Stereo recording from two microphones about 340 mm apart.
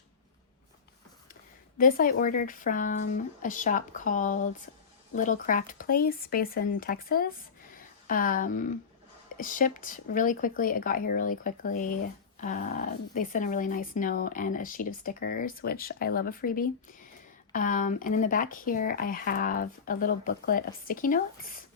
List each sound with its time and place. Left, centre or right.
1.8 s speech: left